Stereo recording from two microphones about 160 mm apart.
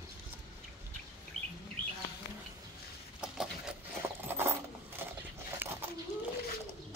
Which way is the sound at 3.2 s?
5° right (ahead or behind).